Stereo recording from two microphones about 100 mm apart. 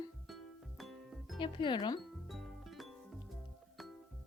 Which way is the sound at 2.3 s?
Centre (ahead or behind).